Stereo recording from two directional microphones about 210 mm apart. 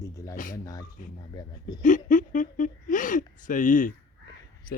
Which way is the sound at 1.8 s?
40° left (ahead or behind).